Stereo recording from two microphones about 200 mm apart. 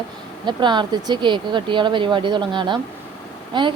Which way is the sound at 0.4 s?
20° right (ahead or behind).